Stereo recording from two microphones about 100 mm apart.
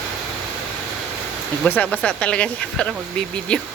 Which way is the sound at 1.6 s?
15° left (ahead or behind).